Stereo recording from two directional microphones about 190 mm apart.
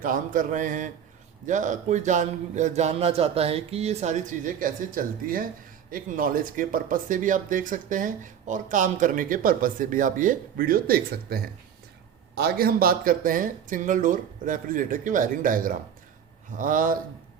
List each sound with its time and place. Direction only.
0.0 s a man's voice: 45° right (ahead or behind)